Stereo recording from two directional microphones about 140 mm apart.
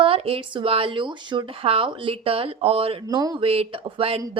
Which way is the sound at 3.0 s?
25° right (ahead or behind).